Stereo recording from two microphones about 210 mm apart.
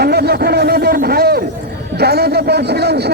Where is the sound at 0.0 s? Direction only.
50° right (ahead or behind).